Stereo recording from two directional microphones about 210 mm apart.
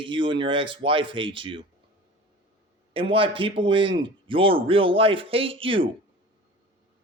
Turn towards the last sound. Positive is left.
turn(degrees=-25)  # may be behind; listen again after turning